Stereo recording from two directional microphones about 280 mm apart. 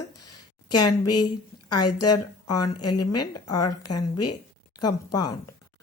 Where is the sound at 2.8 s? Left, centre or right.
Left.